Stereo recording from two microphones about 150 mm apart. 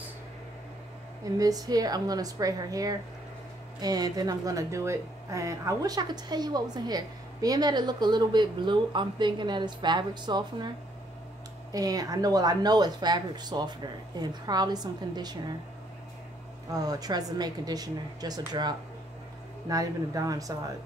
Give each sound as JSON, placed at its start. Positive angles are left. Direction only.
{"t": 1.4, "sound": "a woman's voice", "side_deg": -25}
{"t": 11.7, "sound": "a woman's voice", "side_deg": -25}
{"t": 16.7, "sound": "a woman's voice", "side_deg": -25}